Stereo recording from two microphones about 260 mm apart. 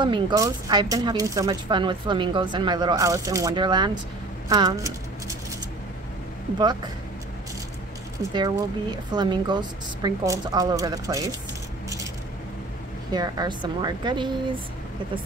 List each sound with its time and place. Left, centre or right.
0.0 s speech: centre
8.2 s speech: centre
13.1 s speech: centre